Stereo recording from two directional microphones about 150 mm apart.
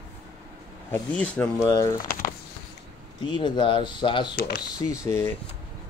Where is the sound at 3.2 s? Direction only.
30° left (ahead or behind).